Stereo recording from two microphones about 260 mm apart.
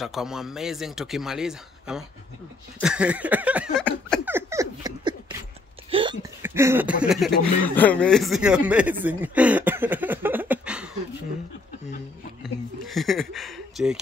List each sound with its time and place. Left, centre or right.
0.0 s a man's voice: centre
4.3 s a sound: centre
6.4 s speech: centre
12.8 s speech: centre